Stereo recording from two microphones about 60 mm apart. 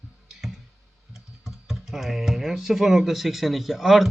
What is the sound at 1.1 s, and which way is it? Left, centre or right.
Speech, centre.